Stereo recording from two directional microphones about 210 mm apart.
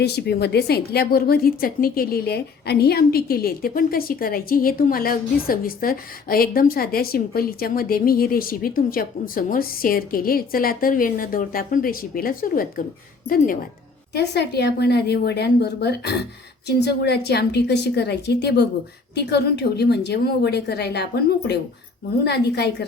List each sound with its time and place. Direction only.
0.0 s a woman's voice: 50° left (ahead or behind)
14.2 s a woman's voice: 50° left (ahead or behind)